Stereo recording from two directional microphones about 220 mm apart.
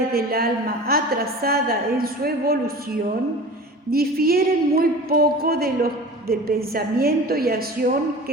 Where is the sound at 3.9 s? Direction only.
45° right (ahead or behind).